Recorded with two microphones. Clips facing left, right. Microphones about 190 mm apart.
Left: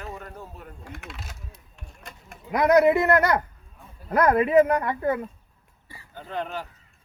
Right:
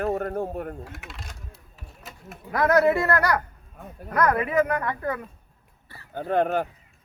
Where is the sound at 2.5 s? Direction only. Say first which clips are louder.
Left 2 dB; 20° left (ahead or behind).